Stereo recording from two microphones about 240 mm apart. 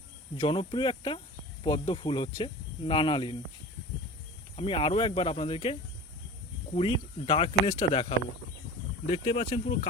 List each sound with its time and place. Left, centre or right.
0.3 s speech: left
4.5 s speech: left